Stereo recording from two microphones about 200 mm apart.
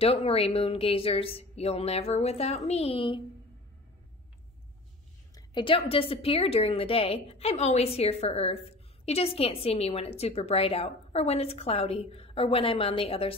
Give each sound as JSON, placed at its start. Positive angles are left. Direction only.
{"t": 0.0, "sound": "a woman's voice", "side_deg": 30}
{"t": 5.3, "sound": "a woman's voice", "side_deg": 25}